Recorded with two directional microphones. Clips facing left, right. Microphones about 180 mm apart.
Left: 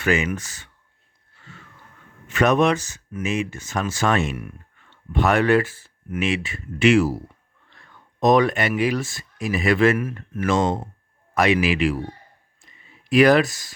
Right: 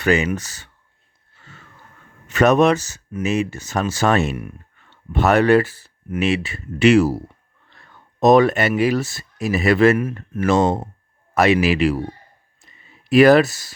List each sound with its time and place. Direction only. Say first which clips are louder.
0.0 s speech: right 3 dB; 35° right (ahead or behind)
2.2 s speech: right 4 dB; 40° right (ahead or behind)
13.1 s speech: right 4 dB; 40° right (ahead or behind)